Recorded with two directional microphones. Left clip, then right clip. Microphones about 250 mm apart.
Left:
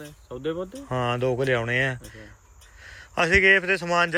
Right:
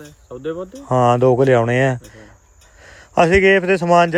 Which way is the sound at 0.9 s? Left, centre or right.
Right.